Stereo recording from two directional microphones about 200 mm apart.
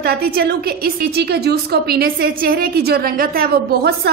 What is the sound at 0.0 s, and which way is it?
A woman's voice, 50° right (ahead or behind).